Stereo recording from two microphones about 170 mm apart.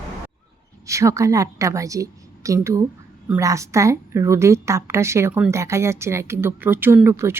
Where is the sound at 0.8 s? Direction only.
15° right (ahead or behind).